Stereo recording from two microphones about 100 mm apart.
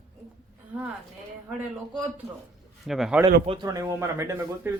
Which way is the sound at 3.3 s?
70° right (ahead or behind).